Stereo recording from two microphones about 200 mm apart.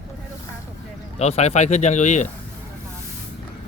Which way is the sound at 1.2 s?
35° left (ahead or behind).